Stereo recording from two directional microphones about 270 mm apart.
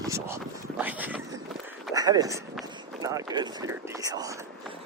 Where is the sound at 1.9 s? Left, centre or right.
Centre.